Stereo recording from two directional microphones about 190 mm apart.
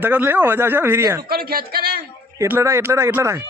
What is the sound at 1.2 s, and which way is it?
Speech, 50° right (ahead or behind).